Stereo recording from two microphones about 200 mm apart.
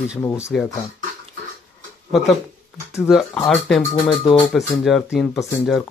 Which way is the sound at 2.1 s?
Centre (ahead or behind).